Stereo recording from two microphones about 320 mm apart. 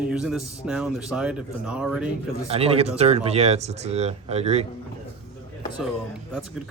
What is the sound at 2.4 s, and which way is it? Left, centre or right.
Speech, centre.